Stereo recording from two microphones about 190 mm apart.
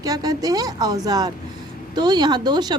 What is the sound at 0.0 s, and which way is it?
A woman's voice, 20° right (ahead or behind).